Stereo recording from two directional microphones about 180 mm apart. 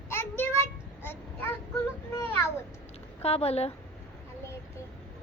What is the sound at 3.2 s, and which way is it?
Speech, 35° left (ahead or behind).